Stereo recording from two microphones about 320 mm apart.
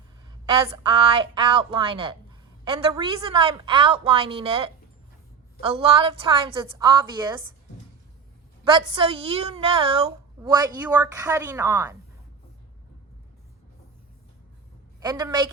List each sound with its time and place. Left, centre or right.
0.4 s a woman's voice: centre
8.6 s a woman's voice: centre
15.0 s a woman's voice: centre